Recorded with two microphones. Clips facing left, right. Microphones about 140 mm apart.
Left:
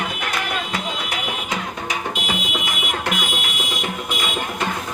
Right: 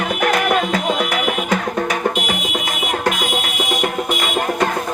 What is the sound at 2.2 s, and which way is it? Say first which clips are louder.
Music: right 3 dB; 75° right (ahead or behind).